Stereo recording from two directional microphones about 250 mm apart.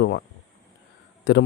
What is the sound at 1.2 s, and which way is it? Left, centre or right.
Speech, left.